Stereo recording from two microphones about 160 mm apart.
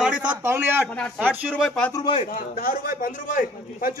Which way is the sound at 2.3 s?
60° left (ahead or behind).